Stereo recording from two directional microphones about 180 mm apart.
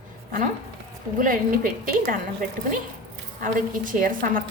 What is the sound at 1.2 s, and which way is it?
Speech, 50° right (ahead or behind).